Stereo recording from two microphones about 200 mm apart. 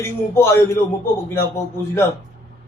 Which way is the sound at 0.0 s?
10° left (ahead or behind).